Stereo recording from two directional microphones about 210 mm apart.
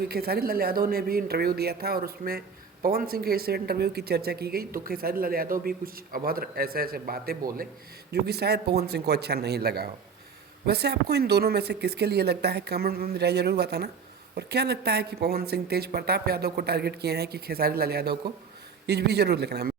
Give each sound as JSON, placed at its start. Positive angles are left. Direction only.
{"t": 0.0, "sound": "speech", "side_deg": -50}